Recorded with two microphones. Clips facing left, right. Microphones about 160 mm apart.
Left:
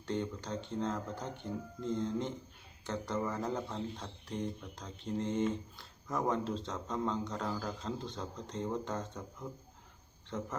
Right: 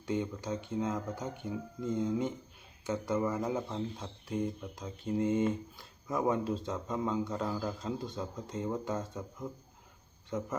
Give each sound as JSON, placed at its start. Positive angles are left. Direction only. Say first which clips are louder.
{"t": 0.0, "sound": "speech", "louder": "right 3 dB", "side_deg": -10}
{"t": 10.2, "sound": "speech", "louder": "right 4 dB", "side_deg": -10}